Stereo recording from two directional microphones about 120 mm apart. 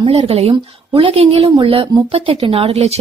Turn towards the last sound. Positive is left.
turn(degrees=-60)  # may be behind; listen again after turning